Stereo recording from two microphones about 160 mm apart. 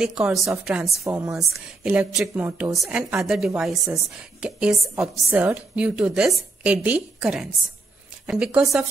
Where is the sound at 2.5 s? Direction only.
15° right (ahead or behind).